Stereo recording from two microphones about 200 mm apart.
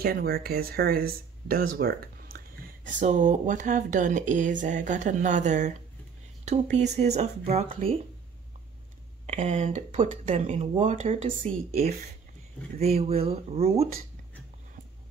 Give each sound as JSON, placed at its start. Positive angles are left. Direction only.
{"t": 0.0, "sound": "speech", "side_deg": -50}
{"t": 9.2, "sound": "speech", "side_deg": -30}